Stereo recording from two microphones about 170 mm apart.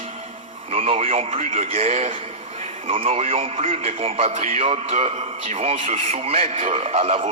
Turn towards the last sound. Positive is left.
turn(degrees=-35)  # may be behind; listen again after turning